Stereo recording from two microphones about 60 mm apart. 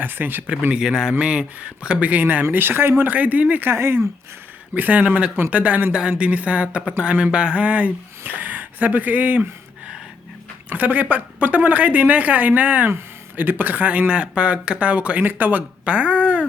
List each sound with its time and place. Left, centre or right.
0.0 s speech: right
0.7 s a man's voice: centre; by 2.9 s right
3.0 s a woman's voice: right
3.7 s speech: right
4.7 s a woman's voice: right
10.7 s a woman's voice: right